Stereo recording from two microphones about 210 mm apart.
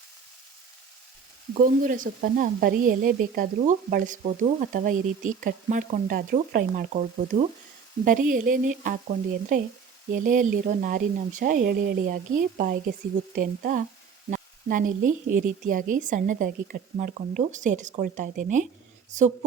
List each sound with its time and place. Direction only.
1.5 s speech: 40° right (ahead or behind)